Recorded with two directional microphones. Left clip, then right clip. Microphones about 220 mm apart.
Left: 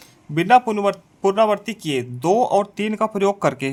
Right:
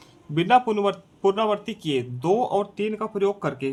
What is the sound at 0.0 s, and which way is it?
Speech, 15° left (ahead or behind).